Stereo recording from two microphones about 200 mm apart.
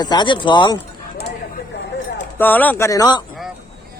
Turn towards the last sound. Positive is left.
turn(degrees=20)  # may be behind; listen again after turning